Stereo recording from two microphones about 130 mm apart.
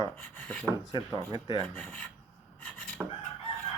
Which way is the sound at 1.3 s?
35° left (ahead or behind).